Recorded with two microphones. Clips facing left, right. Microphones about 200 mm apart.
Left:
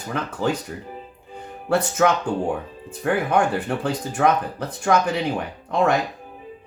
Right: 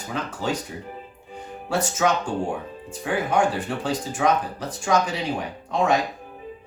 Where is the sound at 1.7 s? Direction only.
60° left (ahead or behind).